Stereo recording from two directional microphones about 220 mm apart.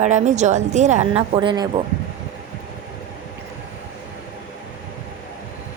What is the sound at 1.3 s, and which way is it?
Speech, 20° right (ahead or behind).